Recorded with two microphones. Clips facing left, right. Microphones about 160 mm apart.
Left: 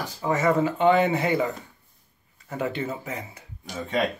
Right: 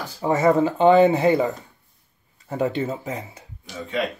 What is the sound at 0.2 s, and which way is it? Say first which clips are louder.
Speech: right 4 dB; 30° right (ahead or behind).